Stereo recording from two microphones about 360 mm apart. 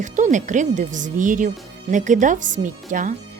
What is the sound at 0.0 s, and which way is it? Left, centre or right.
Speech, centre.